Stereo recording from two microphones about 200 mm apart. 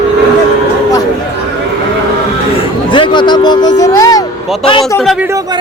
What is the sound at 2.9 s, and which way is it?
Speech, 25° left (ahead or behind).